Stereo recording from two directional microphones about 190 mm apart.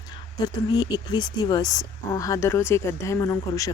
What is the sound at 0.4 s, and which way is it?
A woman's voice, 20° left (ahead or behind).